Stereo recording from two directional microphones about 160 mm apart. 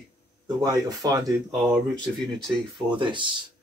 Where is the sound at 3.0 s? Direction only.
30° right (ahead or behind).